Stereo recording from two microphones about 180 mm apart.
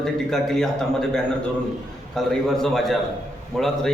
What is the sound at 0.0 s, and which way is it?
Speech, 5° left (ahead or behind).